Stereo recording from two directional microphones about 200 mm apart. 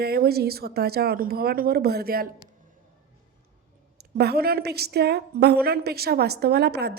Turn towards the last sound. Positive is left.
turn(degrees=-55)  # may be behind; listen again after turning